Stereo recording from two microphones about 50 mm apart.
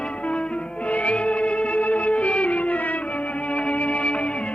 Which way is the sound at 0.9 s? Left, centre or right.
Left.